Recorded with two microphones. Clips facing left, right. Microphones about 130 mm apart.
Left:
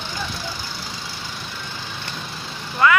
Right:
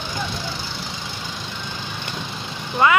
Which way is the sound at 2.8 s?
20° right (ahead or behind).